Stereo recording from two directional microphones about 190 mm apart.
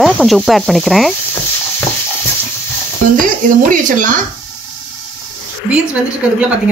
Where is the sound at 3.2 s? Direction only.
45° right (ahead or behind).